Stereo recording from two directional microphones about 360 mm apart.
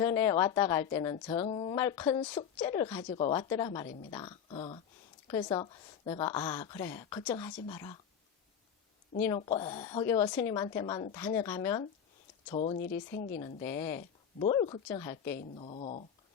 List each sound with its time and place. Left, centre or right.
0.0 s a woman's voice: centre
3.8 s speech: left
4.1 s a woman's voice: centre
9.2 s a woman's voice: centre
12.7 s speech: left
13.7 s a woman's voice: centre